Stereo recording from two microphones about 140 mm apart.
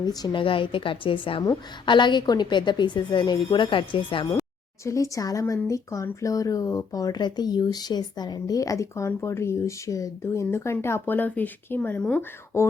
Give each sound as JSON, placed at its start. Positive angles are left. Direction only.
{"t": 0.0, "sound": "a woman's voice", "side_deg": 30}
{"t": 4.8, "sound": "speech", "side_deg": 20}